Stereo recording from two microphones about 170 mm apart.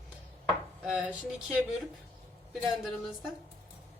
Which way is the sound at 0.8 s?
5° right (ahead or behind).